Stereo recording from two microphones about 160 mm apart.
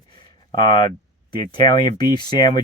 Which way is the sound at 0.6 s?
30° left (ahead or behind).